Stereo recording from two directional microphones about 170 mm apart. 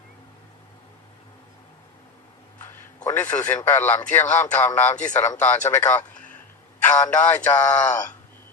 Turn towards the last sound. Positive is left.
turn(degrees=10)  # may be behind; listen again after turning